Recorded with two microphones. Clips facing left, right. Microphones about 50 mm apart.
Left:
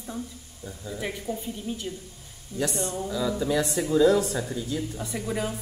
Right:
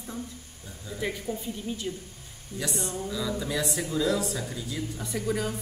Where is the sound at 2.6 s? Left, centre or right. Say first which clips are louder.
Left 5 dB; left.